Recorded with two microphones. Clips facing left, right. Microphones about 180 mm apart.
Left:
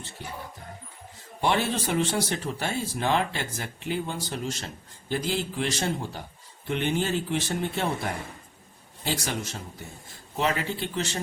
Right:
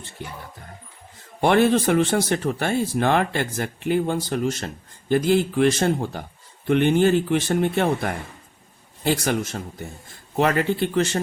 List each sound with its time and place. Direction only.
1.4 s a man's voice: 55° right (ahead or behind)